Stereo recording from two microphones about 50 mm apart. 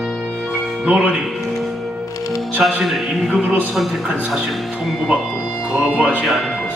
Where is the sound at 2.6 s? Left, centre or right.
Centre.